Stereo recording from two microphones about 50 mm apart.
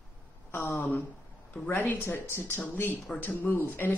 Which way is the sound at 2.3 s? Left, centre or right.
Left.